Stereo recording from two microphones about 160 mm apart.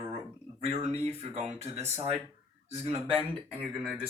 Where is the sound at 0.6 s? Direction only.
40° right (ahead or behind).